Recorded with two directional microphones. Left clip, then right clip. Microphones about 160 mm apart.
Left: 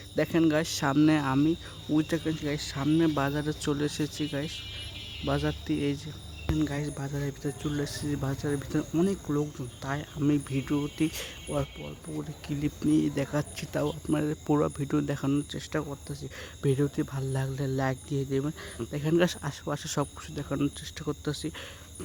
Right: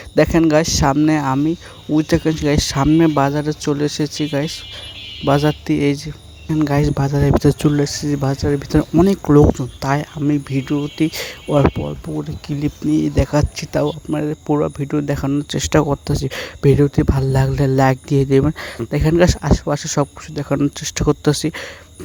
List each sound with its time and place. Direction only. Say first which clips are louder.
0.2 s speech: right 12 dB; 40° right (ahead or behind)
2.1 s speech: right 14 dB; 45° right (ahead or behind)
3.0 s speech: right 12 dB; 30° right (ahead or behind); by 7.7 s 55° right (ahead or behind)
7.7 s speech: right 14 dB; 35° right (ahead or behind)
9.0 s speech: right 18 dB; 50° right (ahead or behind)
10.2 s speech: right 9 dB; 25° right (ahead or behind)
12.1 s speech: right 11 dB; 30° right (ahead or behind)
14.1 s speech: right 8 dB; 15° right (ahead or behind)
15.4 s speech: right 17 dB; 55° right (ahead or behind)
19.1 s speech: right 11 dB; 30° right (ahead or behind)
20.7 s speech: right 17 dB; 50° right (ahead or behind)